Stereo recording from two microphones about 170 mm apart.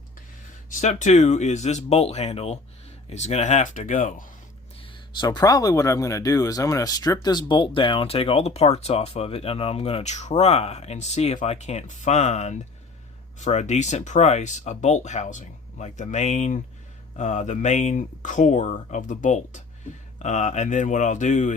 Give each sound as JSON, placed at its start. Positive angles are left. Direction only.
{"t": 0.7, "sound": "speech", "side_deg": 45}
{"t": 4.8, "sound": "speech", "side_deg": 25}